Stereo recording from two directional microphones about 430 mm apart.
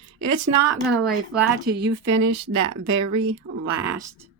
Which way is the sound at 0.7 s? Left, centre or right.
Centre.